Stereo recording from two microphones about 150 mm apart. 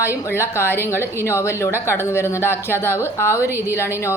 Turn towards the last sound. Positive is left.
turn(degrees=15)  # may be behind; listen again after turning